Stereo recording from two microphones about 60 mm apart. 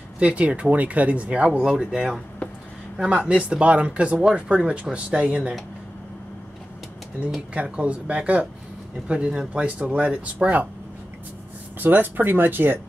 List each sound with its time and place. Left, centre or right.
0.2 s speech: right
7.5 s speech: right
11.8 s speech: right